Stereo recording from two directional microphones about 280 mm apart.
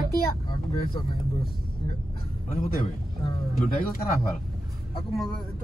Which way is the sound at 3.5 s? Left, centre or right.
Left.